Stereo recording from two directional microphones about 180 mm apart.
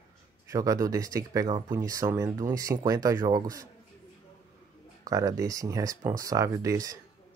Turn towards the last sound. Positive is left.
turn(degrees=-20)  # may be behind; listen again after turning